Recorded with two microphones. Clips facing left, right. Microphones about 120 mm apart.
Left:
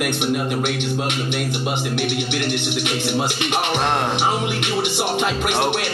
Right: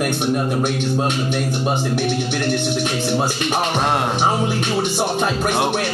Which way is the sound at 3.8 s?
5° right (ahead or behind).